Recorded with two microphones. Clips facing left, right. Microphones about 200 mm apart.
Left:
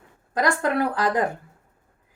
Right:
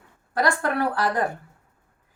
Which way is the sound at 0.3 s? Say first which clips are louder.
Left 1 dB; 15° left (ahead or behind).